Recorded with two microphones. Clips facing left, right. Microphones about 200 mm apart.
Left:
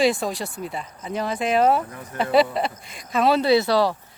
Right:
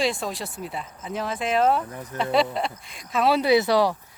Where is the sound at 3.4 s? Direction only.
15° right (ahead or behind).